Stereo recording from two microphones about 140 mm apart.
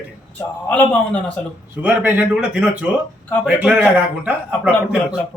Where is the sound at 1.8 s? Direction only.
15° right (ahead or behind).